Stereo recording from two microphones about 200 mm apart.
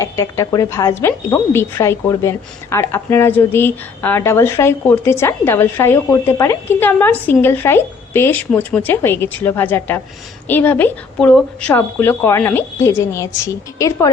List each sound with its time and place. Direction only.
0.0 s speech: 15° left (ahead or behind)